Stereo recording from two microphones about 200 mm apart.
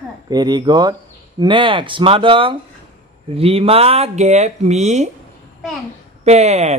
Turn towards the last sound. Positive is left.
turn(degrees=-35)  # may be behind; listen again after turning